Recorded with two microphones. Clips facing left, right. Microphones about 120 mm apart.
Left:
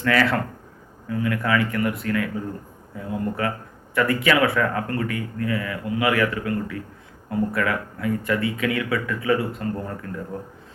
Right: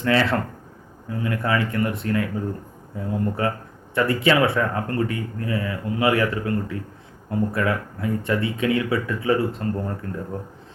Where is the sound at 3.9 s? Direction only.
30° right (ahead or behind).